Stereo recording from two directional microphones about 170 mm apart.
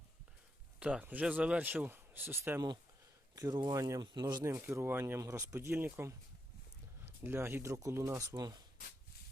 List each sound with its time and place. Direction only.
0.8 s speech: 5° right (ahead or behind); by 8.6 s 25° right (ahead or behind)